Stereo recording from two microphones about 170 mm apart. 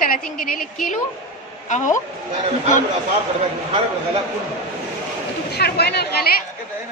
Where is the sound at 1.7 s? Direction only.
45° left (ahead or behind).